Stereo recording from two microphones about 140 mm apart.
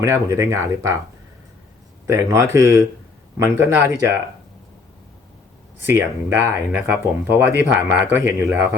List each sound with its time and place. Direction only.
0.0 s speech: 20° right (ahead or behind)
2.0 s speech: 20° right (ahead or behind)
5.8 s speech: 15° right (ahead or behind)